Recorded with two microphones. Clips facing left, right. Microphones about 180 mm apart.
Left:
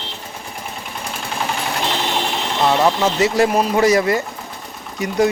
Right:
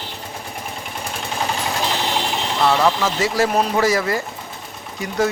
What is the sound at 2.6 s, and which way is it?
Speech, 20° left (ahead or behind).